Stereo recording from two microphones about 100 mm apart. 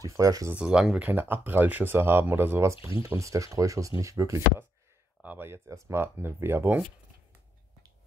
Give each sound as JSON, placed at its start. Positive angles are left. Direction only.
{"t": 0.0, "sound": "speech", "side_deg": -35}
{"t": 0.6, "sound": "speech", "side_deg": -10}
{"t": 5.2, "sound": "speech", "side_deg": -20}